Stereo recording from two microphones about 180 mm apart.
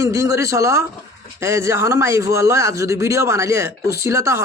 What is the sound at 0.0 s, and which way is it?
Speech, 15° right (ahead or behind).